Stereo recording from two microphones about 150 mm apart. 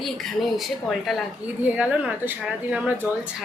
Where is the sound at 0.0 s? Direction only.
Centre (ahead or behind).